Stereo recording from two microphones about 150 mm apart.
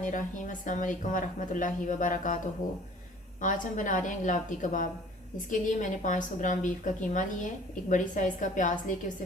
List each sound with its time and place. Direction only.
0.0 s speech: 60° left (ahead or behind)
3.4 s speech: 60° left (ahead or behind)